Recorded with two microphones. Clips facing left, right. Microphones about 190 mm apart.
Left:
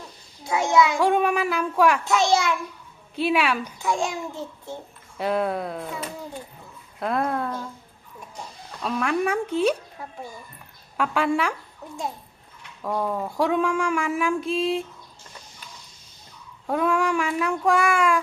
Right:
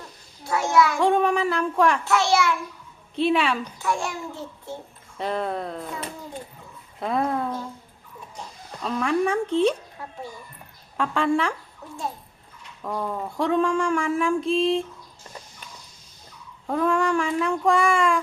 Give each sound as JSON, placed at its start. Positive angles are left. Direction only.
{"t": 0.4, "sound": "speech", "side_deg": 15}
{"t": 0.9, "sound": "speech", "side_deg": 5}
{"t": 2.0, "sound": "speech", "side_deg": 15}
{"t": 3.2, "sound": "speech", "side_deg": 5}
{"t": 3.8, "sound": "speech", "side_deg": 15}
{"t": 5.1, "sound": "speech", "side_deg": 5}
{"t": 8.8, "sound": "speech", "side_deg": 5}
{"t": 10.9, "sound": "speech", "side_deg": 5}
{"t": 12.8, "sound": "speech", "side_deg": 5}
{"t": 16.6, "sound": "speech", "side_deg": 5}